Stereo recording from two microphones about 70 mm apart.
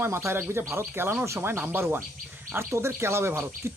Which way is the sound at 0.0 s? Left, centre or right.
Right.